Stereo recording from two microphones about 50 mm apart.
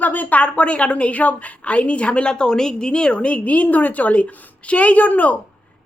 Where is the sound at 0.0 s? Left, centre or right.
Left.